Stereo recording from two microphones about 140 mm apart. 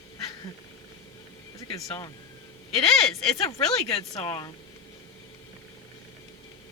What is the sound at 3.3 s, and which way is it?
Speech, 25° left (ahead or behind).